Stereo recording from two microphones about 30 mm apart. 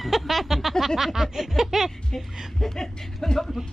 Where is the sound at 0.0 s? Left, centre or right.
Centre.